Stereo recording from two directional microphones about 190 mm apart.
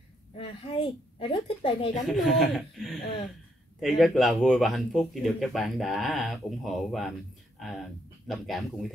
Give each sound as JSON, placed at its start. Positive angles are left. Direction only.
{"t": 0.4, "sound": "a woman's voice", "side_deg": 25}
{"t": 2.0, "sound": "speech", "side_deg": 0}